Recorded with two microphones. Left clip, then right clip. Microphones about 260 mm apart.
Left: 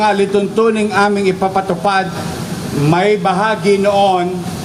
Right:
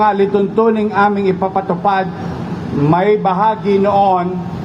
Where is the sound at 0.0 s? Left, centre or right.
Left.